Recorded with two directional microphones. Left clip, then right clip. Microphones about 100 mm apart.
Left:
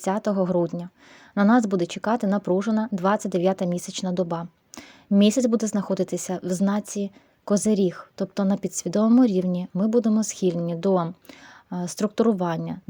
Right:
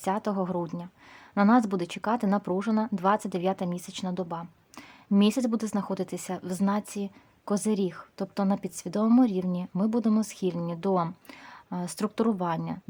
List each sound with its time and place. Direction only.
0.0 s speech: 25° left (ahead or behind)